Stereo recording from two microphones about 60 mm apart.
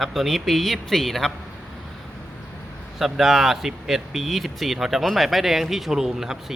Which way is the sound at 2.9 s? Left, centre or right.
Centre.